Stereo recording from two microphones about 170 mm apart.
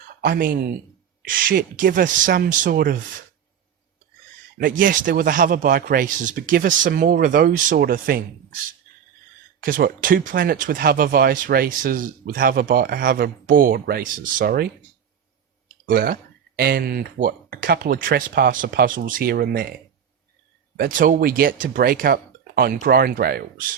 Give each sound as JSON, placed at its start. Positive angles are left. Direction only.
{"t": 0.2, "sound": "speech", "side_deg": -55}
{"t": 4.8, "sound": "speech", "side_deg": -55}
{"t": 9.6, "sound": "speech", "side_deg": -55}
{"t": 15.9, "sound": "speech", "side_deg": -55}
{"t": 20.7, "sound": "speech", "side_deg": -55}